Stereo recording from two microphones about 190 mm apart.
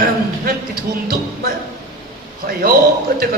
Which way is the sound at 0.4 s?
50° right (ahead or behind).